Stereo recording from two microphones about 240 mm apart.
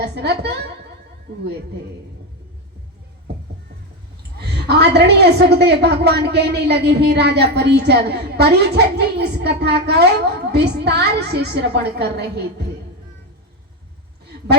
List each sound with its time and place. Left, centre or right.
0.0 s a woman's voice: right
4.4 s a woman's voice: right
14.3 s a sound: right